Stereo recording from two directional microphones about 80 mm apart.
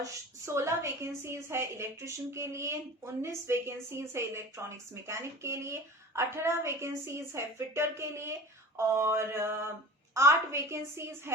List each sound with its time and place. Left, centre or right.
0.0 s a woman's voice: right